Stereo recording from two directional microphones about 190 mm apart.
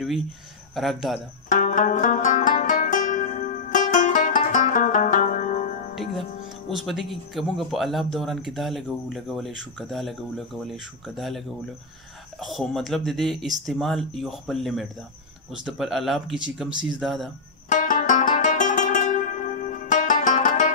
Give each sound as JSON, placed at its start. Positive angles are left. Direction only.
{"t": 0.7, "sound": "speech", "side_deg": 0}
{"t": 1.5, "sound": "music", "side_deg": 40}
{"t": 6.7, "sound": "speech", "side_deg": 0}
{"t": 17.6, "sound": "music", "side_deg": 45}